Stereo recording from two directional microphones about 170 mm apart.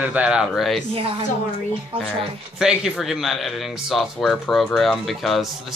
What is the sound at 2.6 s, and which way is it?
Speech, 5° right (ahead or behind).